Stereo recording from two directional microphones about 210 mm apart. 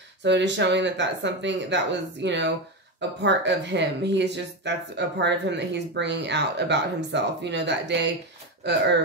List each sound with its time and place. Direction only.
0.2 s speech: 60° right (ahead or behind)